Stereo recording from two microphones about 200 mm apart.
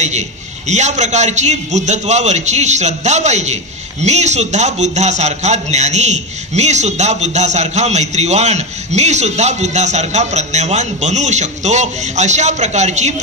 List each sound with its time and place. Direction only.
0.7 s a man's voice: 35° right (ahead or behind)